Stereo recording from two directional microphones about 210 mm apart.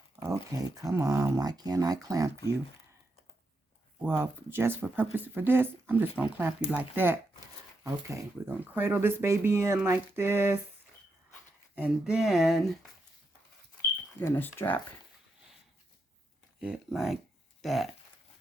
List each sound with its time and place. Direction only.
0.2 s speech: 15° right (ahead or behind)
4.0 s speech: 10° right (ahead or behind)
11.7 s speech: 5° right (ahead or behind)
14.2 s speech: 10° left (ahead or behind)
16.6 s speech: 5° right (ahead or behind)